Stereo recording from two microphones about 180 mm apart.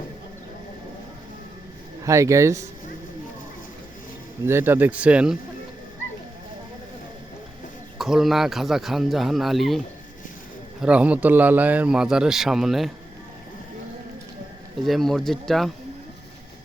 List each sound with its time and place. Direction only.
2.0 s speech: 15° right (ahead or behind)
4.4 s speech: 10° right (ahead or behind)
7.9 s a man's voice: centre (ahead or behind)
14.8 s a man's voice: centre (ahead or behind)